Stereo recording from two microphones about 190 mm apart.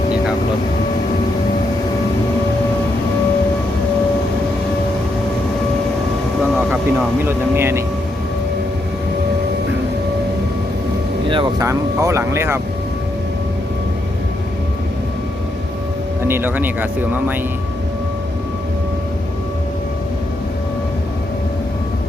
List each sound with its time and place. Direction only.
6.4 s speech: 5° right (ahead or behind)
11.3 s speech: 25° right (ahead or behind)
11.7 s speech: 15° right (ahead or behind)
16.2 s speech: 10° right (ahead or behind)